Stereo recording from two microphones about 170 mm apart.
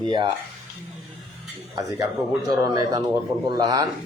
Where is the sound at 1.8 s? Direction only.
20° right (ahead or behind).